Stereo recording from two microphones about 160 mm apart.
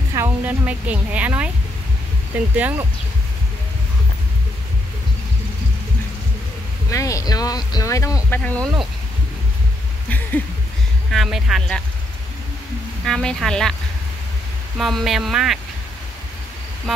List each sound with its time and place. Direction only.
0.1 s a sound: 15° right (ahead or behind)
2.5 s speech: 10° right (ahead or behind)
6.9 s speech: 20° left (ahead or behind)
8.4 s speech: 5° left (ahead or behind)
10.0 s a sound: 10° left (ahead or behind)
11.1 s speech: centre (ahead or behind)
13.0 s speech: 5° left (ahead or behind)
14.8 s speech: centre (ahead or behind)